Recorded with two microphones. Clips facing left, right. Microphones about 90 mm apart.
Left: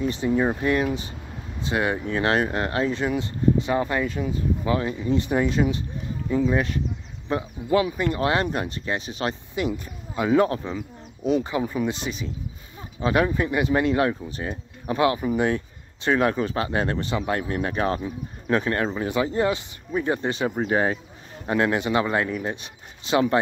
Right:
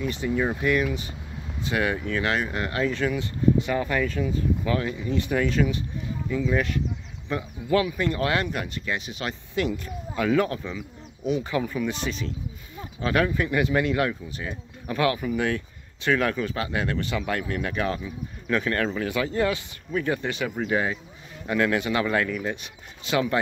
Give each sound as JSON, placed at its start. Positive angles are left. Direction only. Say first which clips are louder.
{"t": 0.0, "sound": "speech", "louder": "left 3 dB", "side_deg": 30}
{"t": 9.6, "sound": "speech", "louder": "right 2 dB", "side_deg": 20}
{"t": 11.4, "sound": "speech", "louder": "left 1 dB", "side_deg": 25}
{"t": 21.5, "sound": "speech", "louder": "left 1 dB", "side_deg": 25}